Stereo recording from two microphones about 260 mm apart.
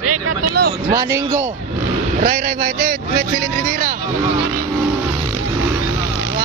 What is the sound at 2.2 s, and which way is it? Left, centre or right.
Speech, right.